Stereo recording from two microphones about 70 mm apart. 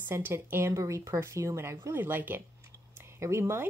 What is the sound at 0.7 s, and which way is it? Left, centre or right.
A woman's voice, right.